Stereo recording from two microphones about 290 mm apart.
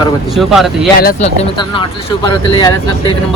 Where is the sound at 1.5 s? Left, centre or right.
Centre.